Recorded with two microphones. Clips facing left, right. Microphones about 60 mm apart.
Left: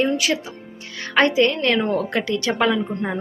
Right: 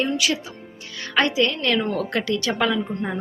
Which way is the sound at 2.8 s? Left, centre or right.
Centre.